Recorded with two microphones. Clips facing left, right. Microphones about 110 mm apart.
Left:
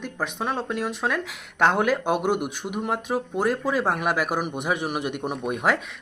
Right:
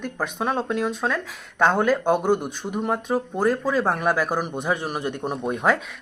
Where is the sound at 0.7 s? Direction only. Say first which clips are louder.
Right 2 dB; 5° left (ahead or behind).